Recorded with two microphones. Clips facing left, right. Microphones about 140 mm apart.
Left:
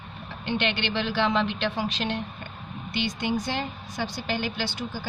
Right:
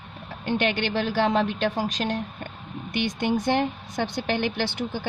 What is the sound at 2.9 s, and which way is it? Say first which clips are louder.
A woman's voice: right 3 dB; 55° right (ahead or behind).